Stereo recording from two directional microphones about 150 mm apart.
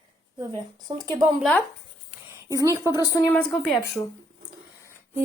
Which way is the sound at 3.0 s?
20° left (ahead or behind).